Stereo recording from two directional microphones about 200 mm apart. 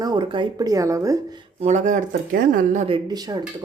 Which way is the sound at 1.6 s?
35° right (ahead or behind).